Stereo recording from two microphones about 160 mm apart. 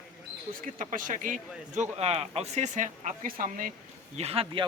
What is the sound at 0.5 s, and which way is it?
Speech, 60° right (ahead or behind).